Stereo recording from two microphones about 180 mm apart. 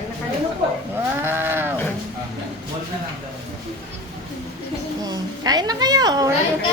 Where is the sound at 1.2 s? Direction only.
10° right (ahead or behind).